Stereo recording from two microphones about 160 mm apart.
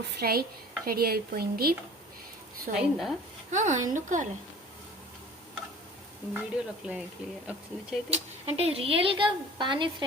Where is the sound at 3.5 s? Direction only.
50° right (ahead or behind).